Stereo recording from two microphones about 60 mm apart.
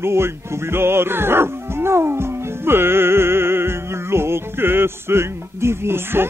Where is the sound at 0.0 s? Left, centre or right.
Right.